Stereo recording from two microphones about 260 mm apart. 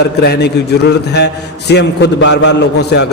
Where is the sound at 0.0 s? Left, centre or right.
Left.